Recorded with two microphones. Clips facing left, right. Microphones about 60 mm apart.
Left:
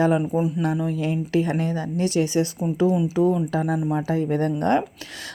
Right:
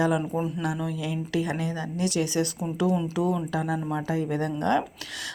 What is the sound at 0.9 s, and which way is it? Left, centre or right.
A woman's voice, left.